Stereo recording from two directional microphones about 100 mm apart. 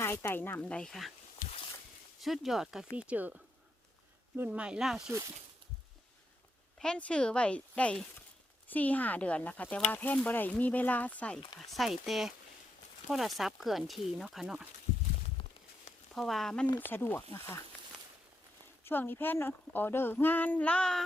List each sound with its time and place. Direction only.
0.0 s speech: 25° left (ahead or behind); by 1.1 s 5° left (ahead or behind)
2.2 s speech: centre (ahead or behind)
6.7 s speech: 10° left (ahead or behind)
11.6 s speech: centre (ahead or behind)
16.1 s speech: centre (ahead or behind)
16.7 s speech: 20° left (ahead or behind)
18.9 s speech: 20° left (ahead or behind)